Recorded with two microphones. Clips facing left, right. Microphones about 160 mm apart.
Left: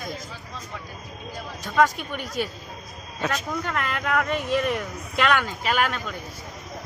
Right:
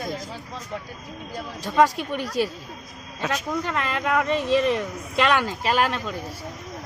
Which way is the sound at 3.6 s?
30° right (ahead or behind).